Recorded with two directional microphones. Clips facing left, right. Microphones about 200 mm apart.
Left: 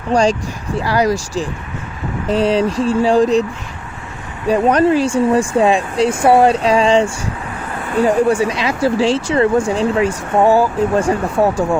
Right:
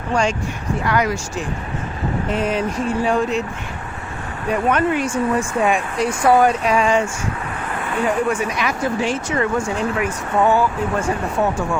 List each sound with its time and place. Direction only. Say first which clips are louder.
0.1 s speech: left 6 dB; 35° left (ahead or behind)
4.4 s speech: left 6 dB; 35° left (ahead or behind)